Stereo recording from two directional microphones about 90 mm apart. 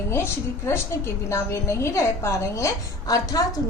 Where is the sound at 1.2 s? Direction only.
30° left (ahead or behind).